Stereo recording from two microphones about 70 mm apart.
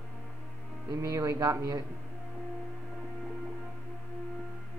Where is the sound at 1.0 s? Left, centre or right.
Right.